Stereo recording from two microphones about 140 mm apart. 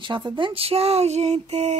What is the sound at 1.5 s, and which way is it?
Mantra, 55° right (ahead or behind).